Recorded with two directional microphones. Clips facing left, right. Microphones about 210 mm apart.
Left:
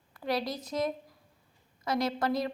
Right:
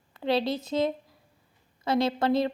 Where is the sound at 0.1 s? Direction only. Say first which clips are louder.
Right 6 dB; 25° right (ahead or behind).